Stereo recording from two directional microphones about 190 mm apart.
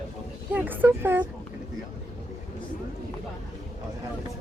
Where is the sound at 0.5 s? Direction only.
10° right (ahead or behind).